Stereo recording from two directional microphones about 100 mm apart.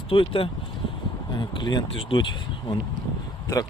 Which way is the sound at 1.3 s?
50° left (ahead or behind).